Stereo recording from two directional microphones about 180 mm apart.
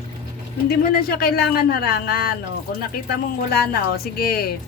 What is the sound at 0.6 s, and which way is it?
A man's voice, 60° left (ahead or behind).